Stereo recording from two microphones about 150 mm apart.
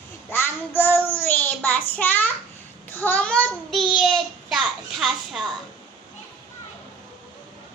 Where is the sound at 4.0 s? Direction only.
Centre (ahead or behind).